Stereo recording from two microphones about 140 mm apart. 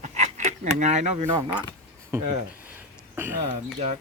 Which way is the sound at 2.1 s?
15° right (ahead or behind).